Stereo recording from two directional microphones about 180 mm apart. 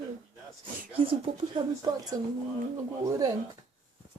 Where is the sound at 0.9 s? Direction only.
30° right (ahead or behind).